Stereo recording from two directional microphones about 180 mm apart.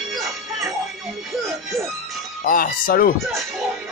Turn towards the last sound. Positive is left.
turn(degrees=55)  # may be behind; listen again after turning